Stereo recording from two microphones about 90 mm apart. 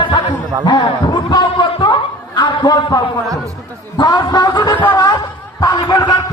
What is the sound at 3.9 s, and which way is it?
Speech, 50° left (ahead or behind).